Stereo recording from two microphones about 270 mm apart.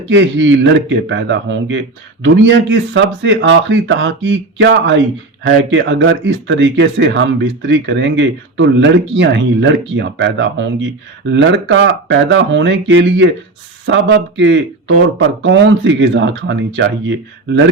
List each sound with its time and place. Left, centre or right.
0.1 s speech: right